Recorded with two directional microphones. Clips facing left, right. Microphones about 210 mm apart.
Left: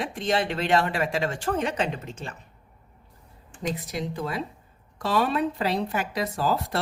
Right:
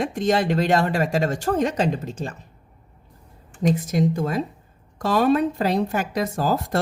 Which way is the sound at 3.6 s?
45° right (ahead or behind).